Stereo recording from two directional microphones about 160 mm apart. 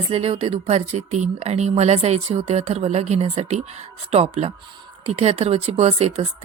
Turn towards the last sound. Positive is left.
turn(degrees=-40)  # may be behind; listen again after turning